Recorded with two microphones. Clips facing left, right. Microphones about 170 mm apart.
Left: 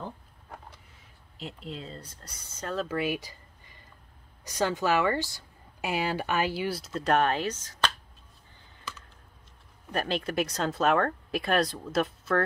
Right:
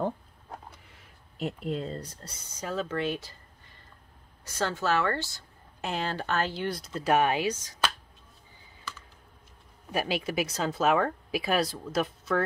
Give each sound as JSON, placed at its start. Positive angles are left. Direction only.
{"t": 1.4, "sound": "speech", "side_deg": -50}
{"t": 2.6, "sound": "speech", "side_deg": 0}
{"t": 9.8, "sound": "speech", "side_deg": -5}